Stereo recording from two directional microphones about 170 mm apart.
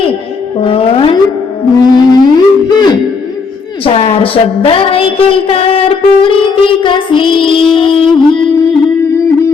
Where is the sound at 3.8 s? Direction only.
35° left (ahead or behind).